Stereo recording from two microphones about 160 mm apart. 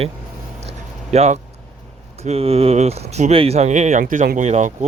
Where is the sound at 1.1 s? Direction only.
40° right (ahead or behind).